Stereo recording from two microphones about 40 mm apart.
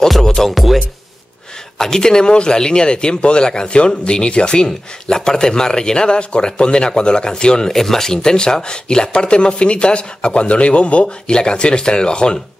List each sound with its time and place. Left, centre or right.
0.2 s music: centre
1.8 s speech: centre
7.7 s speech: centre